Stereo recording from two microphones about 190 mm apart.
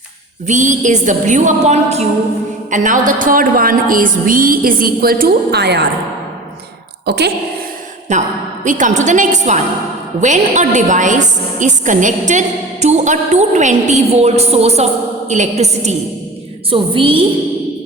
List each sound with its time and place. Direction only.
0.4 s a woman's voice: 40° right (ahead or behind); by 5.8 s 60° right (ahead or behind)
7.0 s a woman's voice: 60° right (ahead or behind)
8.1 s a woman's voice: 40° right (ahead or behind)